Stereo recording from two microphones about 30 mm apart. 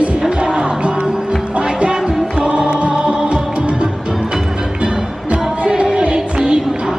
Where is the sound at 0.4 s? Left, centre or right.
Right.